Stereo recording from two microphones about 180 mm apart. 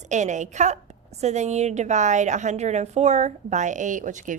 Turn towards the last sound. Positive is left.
turn(degrees=-45)  # may be behind; listen again after turning